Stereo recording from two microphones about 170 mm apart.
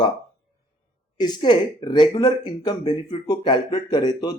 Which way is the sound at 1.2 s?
25° left (ahead or behind).